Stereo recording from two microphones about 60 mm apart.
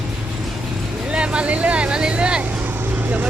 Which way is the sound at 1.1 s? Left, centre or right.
Centre.